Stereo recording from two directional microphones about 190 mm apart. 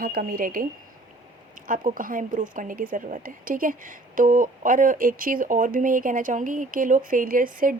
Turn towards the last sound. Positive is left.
turn(degrees=-45)  # may be behind; listen again after turning